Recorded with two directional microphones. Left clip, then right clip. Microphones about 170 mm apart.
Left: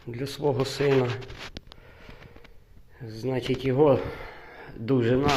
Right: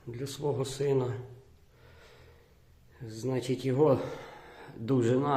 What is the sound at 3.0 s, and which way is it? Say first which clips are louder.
Speech: left 4 dB; 10° left (ahead or behind).